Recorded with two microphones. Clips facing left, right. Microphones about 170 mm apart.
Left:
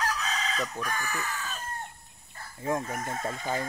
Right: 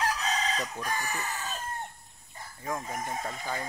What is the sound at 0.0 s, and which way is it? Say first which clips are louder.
Chicken: right 2 dB; 30° right (ahead or behind).